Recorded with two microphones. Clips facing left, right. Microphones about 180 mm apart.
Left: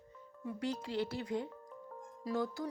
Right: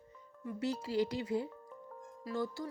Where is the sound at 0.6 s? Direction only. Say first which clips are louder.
Right 3 dB; 5° right (ahead or behind).